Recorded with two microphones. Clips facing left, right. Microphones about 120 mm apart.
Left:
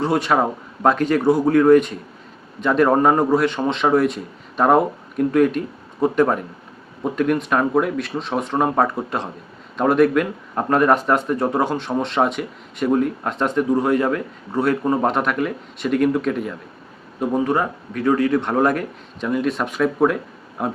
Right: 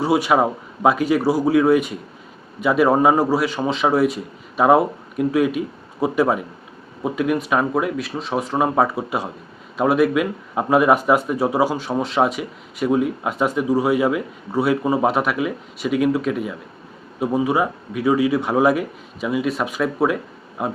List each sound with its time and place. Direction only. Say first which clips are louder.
0.0 s speech: right 1 dB; 10° right (ahead or behind)